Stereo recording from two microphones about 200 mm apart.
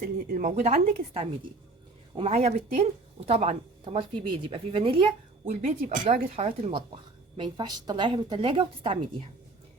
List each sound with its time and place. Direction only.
0.3 s a woman's voice: 40° right (ahead or behind)
5.6 s speech: 40° right (ahead or behind)